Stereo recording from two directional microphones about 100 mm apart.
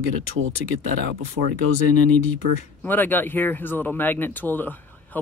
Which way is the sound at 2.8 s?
20° left (ahead or behind).